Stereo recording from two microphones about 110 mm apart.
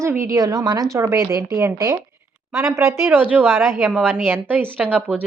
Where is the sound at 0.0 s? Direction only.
25° right (ahead or behind).